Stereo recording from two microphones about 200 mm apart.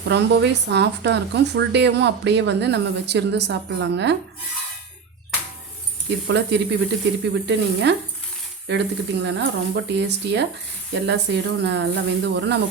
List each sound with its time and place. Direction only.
0.1 s a woman's voice: 60° right (ahead or behind)
6.1 s a woman's voice: 60° right (ahead or behind)